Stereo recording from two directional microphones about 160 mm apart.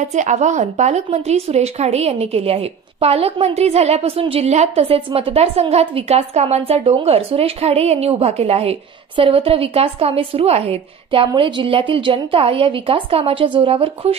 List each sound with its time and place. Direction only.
0.0 s a woman's voice: 45° right (ahead or behind)